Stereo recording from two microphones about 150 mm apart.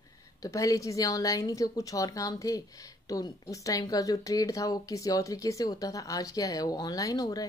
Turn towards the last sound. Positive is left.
turn(degrees=25)  # may be behind; listen again after turning